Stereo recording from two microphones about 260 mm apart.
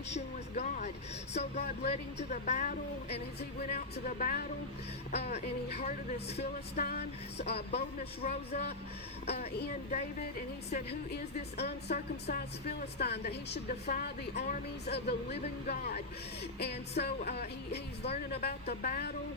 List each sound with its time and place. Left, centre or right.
0.5 s a woman's voice: left
6.7 s a woman's voice: left
7.5 s speech: left
9.6 s a woman's voice: left
18.0 s speech: left
18.3 s a woman's voice: left